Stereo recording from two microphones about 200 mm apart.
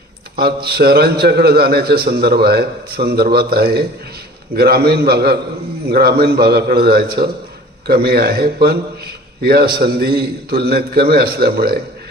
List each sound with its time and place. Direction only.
0.3 s a man's voice: 50° right (ahead or behind)